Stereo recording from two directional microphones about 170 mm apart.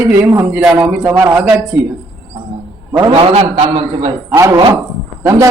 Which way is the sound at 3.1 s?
30° right (ahead or behind).